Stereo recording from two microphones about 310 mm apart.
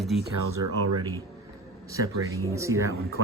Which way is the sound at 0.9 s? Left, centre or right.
Centre.